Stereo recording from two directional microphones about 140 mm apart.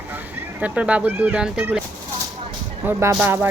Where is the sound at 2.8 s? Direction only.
10° right (ahead or behind).